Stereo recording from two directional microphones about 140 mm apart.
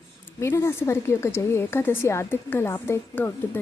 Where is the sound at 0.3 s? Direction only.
20° left (ahead or behind).